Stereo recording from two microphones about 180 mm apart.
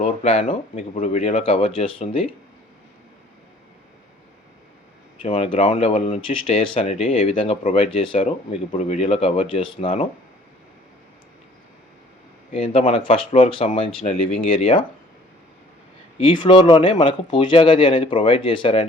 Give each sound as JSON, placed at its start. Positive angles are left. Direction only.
{"t": 0.0, "sound": "speech", "side_deg": 40}
{"t": 5.2, "sound": "speech", "side_deg": 30}
{"t": 12.5, "sound": "speech", "side_deg": 30}
{"t": 16.1, "sound": "speech", "side_deg": 30}